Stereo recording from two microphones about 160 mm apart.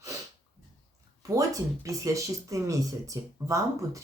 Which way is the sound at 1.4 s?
20° right (ahead or behind).